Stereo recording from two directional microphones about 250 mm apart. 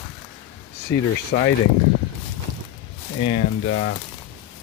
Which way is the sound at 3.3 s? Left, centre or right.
Left.